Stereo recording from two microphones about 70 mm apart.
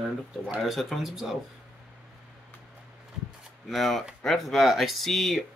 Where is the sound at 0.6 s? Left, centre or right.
Centre.